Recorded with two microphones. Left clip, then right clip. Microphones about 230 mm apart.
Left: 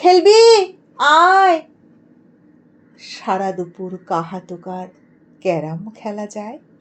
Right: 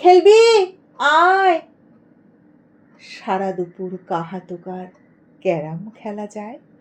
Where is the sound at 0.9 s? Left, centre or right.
Left.